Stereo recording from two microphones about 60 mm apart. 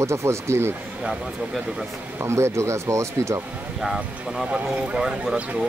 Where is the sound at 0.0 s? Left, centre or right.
Right.